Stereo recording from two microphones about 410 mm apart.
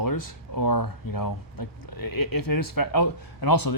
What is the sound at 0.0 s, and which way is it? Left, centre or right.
Speech, left.